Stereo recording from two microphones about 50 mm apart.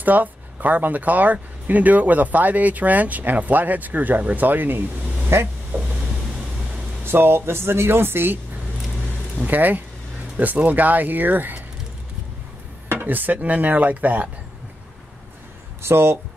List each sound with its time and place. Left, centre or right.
0.0 s speech: right
5.3 s speech: right
7.1 s speech: right
9.5 s speech: right
13.0 s speech: right
15.8 s speech: right